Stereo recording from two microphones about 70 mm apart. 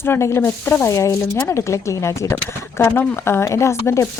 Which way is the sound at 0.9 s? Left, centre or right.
Left.